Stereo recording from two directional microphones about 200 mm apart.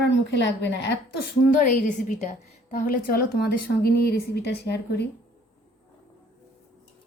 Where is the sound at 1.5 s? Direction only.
40° left (ahead or behind); by 5.0 s 55° left (ahead or behind).